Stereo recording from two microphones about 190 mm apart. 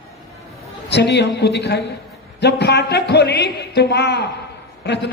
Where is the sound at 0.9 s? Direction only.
65° left (ahead or behind).